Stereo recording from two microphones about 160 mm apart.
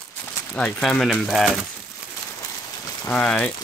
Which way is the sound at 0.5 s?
5° left (ahead or behind).